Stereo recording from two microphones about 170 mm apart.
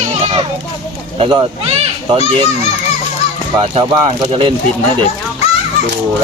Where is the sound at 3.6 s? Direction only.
35° right (ahead or behind).